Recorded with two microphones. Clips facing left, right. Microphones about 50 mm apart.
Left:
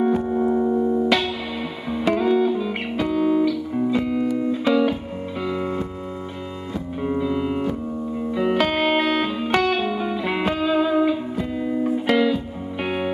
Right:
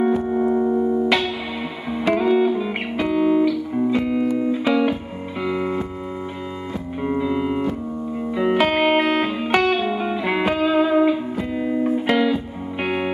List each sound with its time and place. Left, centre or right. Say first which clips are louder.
0.2 s music: right 1 dB; centre
7.0 s music: right 1 dB; centre
12.8 s music: right 2 dB; centre